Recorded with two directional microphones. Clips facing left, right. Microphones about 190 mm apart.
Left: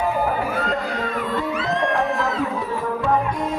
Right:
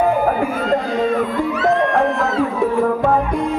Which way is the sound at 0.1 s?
50° right (ahead or behind).